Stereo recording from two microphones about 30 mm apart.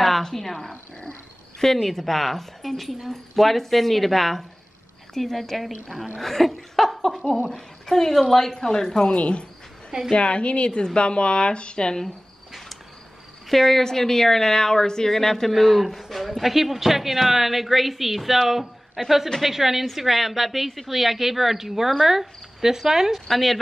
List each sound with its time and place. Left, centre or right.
0.2 s speech: centre
1.8 s a woman's voice: centre
9.1 s speech: left
13.5 s speech: centre
23.3 s speech: centre